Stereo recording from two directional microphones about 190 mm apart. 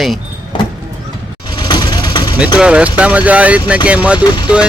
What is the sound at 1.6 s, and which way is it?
Vehicle, 20° left (ahead or behind).